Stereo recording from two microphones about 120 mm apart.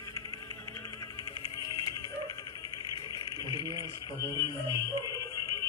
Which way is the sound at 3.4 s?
35° right (ahead or behind).